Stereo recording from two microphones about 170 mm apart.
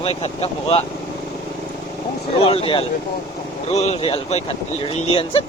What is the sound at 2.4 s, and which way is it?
Speech, 35° left (ahead or behind).